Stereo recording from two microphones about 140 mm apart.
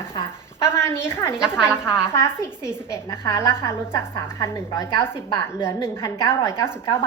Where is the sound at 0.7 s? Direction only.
20° left (ahead or behind).